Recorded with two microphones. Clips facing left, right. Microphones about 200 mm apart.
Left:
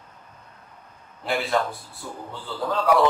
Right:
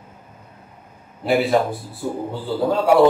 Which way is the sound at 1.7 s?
30° right (ahead or behind).